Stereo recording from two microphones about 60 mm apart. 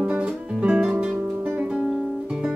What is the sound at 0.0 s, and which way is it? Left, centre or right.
Music, right.